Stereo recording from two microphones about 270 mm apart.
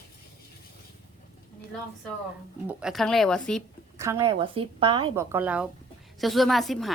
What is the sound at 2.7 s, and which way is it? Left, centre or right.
Speech, centre.